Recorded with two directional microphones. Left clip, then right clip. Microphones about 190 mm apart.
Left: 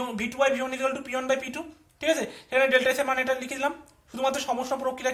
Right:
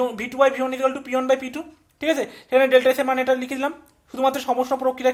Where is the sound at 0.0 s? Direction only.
45° right (ahead or behind).